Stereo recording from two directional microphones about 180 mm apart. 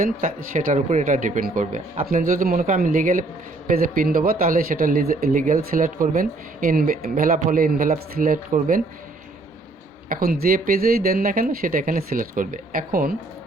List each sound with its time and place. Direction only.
0.0 s speech: 50° right (ahead or behind)
10.1 s speech: 55° right (ahead or behind)